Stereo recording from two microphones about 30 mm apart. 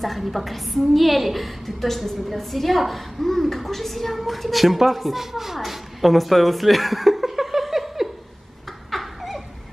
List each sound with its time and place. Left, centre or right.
0.0 s a woman's voice: centre
5.6 s chuckle: centre
8.9 s laughter: centre